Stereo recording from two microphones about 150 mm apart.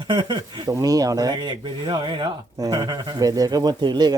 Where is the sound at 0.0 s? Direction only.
30° right (ahead or behind).